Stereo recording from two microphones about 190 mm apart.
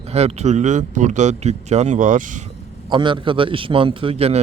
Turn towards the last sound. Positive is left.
turn(degrees=-30)  # may be behind; listen again after turning